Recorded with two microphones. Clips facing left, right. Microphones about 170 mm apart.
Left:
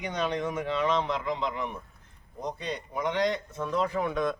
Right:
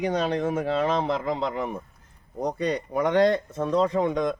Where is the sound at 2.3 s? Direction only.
65° right (ahead or behind).